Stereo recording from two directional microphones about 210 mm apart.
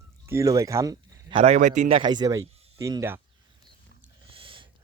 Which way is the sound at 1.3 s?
30° right (ahead or behind).